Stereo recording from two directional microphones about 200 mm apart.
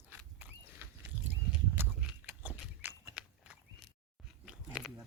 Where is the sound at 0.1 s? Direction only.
10° right (ahead or behind).